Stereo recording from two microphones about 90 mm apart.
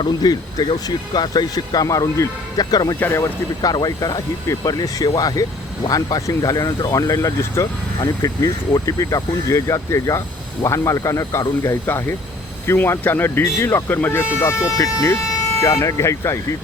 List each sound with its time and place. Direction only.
0.2 s speech: 50° left (ahead or behind)
2.6 s speech: 45° left (ahead or behind)
3.0 s speech: 25° left (ahead or behind)
3.6 s speech: 45° left (ahead or behind)